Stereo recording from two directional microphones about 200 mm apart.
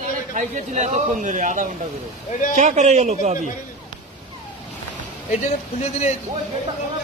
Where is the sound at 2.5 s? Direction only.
35° right (ahead or behind).